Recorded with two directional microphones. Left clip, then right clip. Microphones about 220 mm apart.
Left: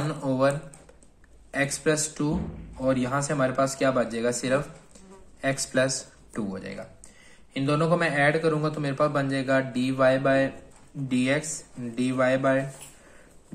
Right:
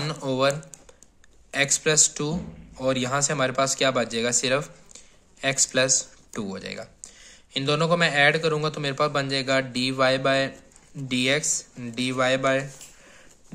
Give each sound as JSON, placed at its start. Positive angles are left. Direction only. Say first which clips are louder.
{"t": 0.0, "sound": "a man's voice", "louder": "right 1 dB", "side_deg": -35}